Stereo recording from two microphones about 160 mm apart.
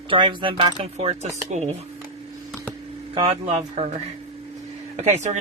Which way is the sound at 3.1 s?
40° right (ahead or behind).